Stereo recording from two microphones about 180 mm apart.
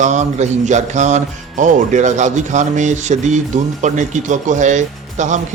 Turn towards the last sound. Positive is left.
turn(degrees=-40)  # may be behind; listen again after turning